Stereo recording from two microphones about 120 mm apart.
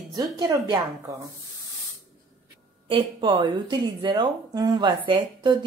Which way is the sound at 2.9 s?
45° right (ahead or behind).